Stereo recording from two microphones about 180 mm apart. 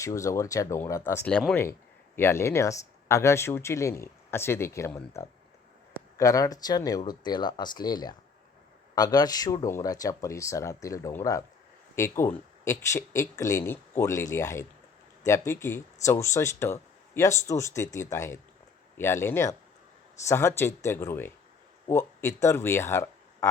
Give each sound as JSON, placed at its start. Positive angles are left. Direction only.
{"t": 0.0, "sound": "speech", "side_deg": 15}